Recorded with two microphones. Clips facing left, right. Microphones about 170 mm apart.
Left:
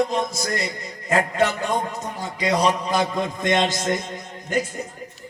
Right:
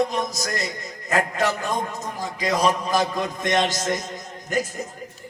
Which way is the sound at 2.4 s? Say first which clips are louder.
Left 1 dB; 25° left (ahead or behind).